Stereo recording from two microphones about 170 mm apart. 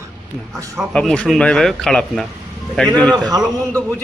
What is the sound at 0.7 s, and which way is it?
Speech, 5° left (ahead or behind).